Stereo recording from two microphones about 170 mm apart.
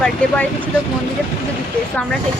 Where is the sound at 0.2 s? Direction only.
5° left (ahead or behind).